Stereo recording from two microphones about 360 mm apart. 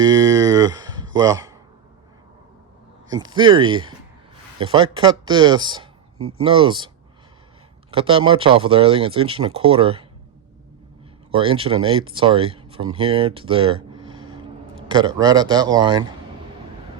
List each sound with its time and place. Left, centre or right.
0.0 s speech: centre
3.1 s speech: centre
6.1 s speech: right
6.4 s speech: centre
11.3 s speech: centre